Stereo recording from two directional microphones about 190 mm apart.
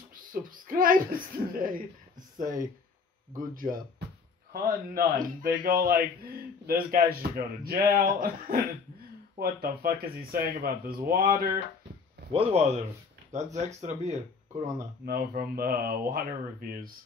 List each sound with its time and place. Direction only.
0.1 s a man's voice: 45° right (ahead or behind)
12.3 s speech: 30° right (ahead or behind)
15.0 s a man's voice: 50° right (ahead or behind)